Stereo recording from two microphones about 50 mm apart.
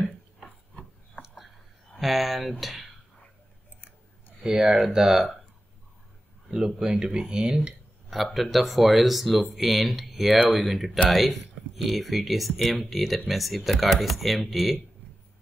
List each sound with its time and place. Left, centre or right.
1.2 s a sound: centre
2.0 s speech: centre
4.6 s speech: centre
6.5 s speech: centre
8.1 s speech: centre